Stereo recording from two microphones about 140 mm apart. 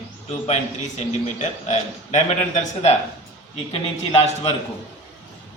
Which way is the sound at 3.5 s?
40° left (ahead or behind).